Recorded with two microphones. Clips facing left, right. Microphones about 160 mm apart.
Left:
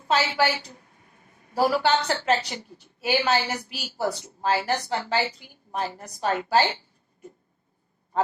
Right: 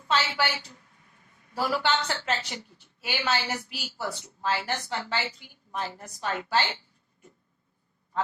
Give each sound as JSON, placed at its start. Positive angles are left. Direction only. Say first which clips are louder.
{"t": 0.1, "sound": "a woman's voice", "louder": "left 4 dB", "side_deg": 40}